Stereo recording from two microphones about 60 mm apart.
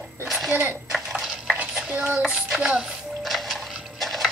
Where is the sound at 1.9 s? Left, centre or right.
Right.